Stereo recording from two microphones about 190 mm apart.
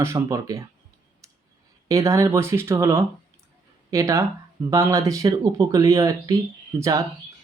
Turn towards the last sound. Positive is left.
turn(degrees=-15)  # may be behind; listen again after turning